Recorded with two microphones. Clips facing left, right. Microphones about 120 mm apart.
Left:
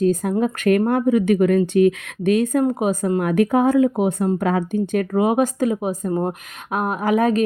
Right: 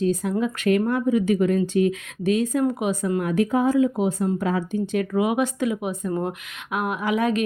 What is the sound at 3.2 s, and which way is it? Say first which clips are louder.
Speech: left 4 dB; 60° left (ahead or behind).